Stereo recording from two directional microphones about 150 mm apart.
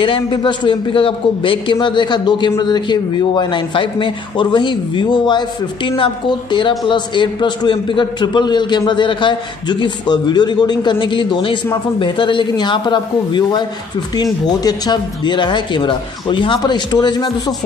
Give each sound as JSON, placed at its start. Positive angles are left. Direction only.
{"t": 0.0, "sound": "a man's voice", "side_deg": 35}
{"t": 6.9, "sound": "a man's voice", "side_deg": 30}